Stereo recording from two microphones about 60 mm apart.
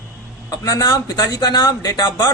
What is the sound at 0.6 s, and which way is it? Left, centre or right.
Speech, left.